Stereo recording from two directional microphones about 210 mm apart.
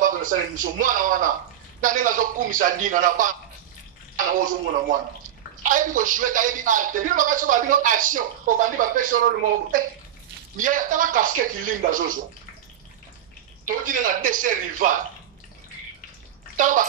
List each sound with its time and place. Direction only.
0.0 s a man's voice: 40° right (ahead or behind)
10.6 s a man's voice: 40° right (ahead or behind)
13.7 s a man's voice: 40° right (ahead or behind)
16.5 s a child's voice: 40° right (ahead or behind)